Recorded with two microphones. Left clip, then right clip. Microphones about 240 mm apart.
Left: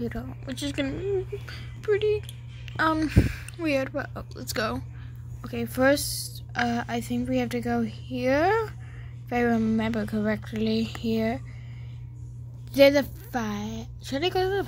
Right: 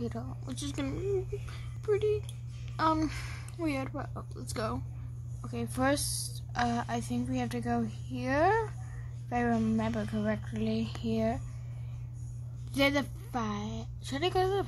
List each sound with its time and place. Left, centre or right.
0.5 s a woman's voice: centre
12.7 s a woman's voice: centre